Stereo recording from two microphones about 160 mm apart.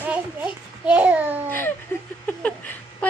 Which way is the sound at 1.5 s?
15° left (ahead or behind).